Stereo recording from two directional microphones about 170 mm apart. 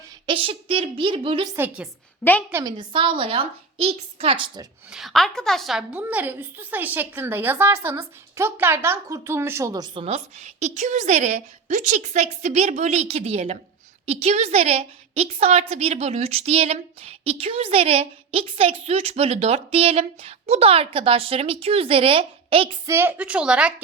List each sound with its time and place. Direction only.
0.3 s a woman's voice: 30° right (ahead or behind)
1.5 s a woman's voice: 10° right (ahead or behind)
2.7 s a woman's voice: 30° right (ahead or behind)
4.9 s a woman's voice: centre (ahead or behind); by 22.8 s 30° right (ahead or behind)
22.9 s a woman's voice: 15° right (ahead or behind)